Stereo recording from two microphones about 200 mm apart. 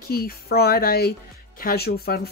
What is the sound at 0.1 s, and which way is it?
Speech, 50° left (ahead or behind).